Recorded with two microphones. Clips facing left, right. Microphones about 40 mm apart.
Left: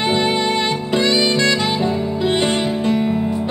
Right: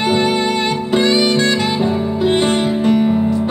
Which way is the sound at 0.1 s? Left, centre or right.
Left.